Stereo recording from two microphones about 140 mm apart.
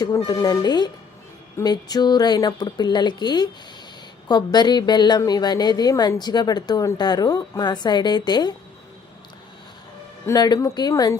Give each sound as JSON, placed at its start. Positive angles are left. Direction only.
{"t": 0.0, "sound": "a woman's voice", "side_deg": 30}
{"t": 10.2, "sound": "speech", "side_deg": 30}